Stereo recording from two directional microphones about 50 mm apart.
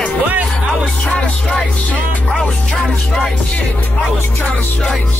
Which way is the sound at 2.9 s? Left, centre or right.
Centre.